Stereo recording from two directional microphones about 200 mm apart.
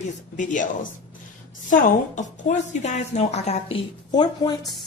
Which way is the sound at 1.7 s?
40° left (ahead or behind).